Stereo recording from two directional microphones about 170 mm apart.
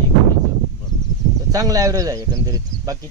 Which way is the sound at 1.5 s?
20° right (ahead or behind).